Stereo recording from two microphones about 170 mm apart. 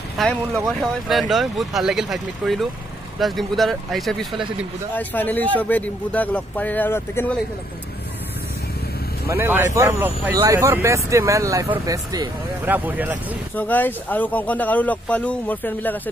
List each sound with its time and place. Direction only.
0.2 s speech: 5° left (ahead or behind)
9.3 s speech: 15° right (ahead or behind)
12.6 s speech: 10° right (ahead or behind)
13.6 s speech: 10° left (ahead or behind)